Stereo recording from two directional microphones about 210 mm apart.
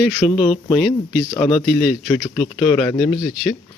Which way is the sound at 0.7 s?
Centre (ahead or behind).